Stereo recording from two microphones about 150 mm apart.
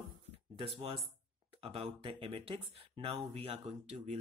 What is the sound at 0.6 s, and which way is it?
Speech, 40° right (ahead or behind).